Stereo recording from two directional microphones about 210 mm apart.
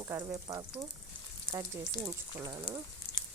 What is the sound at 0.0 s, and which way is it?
Speech, 15° right (ahead or behind).